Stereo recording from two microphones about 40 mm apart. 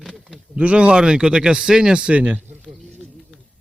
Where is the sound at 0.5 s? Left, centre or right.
Right.